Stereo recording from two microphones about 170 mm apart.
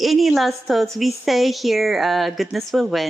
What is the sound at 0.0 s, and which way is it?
A woman's voice, centre (ahead or behind).